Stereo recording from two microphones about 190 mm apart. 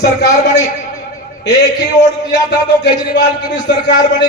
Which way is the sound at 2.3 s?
65° left (ahead or behind).